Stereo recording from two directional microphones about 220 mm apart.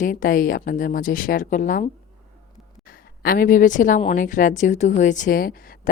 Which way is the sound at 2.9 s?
40° left (ahead or behind).